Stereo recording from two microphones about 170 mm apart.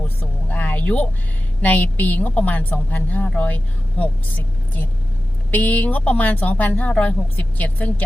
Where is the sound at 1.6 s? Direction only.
10° left (ahead or behind).